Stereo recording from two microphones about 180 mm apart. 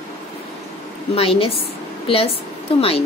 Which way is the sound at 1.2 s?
30° left (ahead or behind).